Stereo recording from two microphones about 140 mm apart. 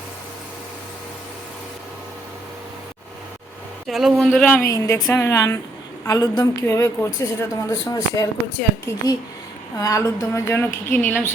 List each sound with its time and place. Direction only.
3.8 s speech: centre (ahead or behind)
4.6 s a woman's voice: 20° left (ahead or behind)